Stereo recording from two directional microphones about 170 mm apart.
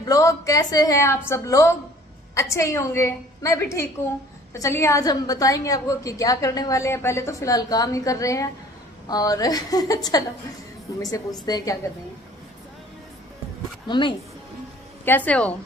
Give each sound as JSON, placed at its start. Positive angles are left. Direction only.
{"t": 0.0, "sound": "a woman's voice", "side_deg": 20}
{"t": 11.4, "sound": "a woman's voice", "side_deg": 20}
{"t": 13.8, "sound": "a woman's voice", "side_deg": 30}
{"t": 15.0, "sound": "a woman's voice", "side_deg": 10}